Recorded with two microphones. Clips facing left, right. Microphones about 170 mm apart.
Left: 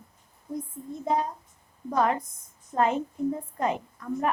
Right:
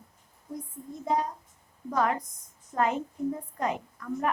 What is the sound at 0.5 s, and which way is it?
A woman's voice, 25° left (ahead or behind).